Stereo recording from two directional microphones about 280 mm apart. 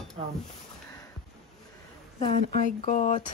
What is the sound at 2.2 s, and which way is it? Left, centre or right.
Speech, left.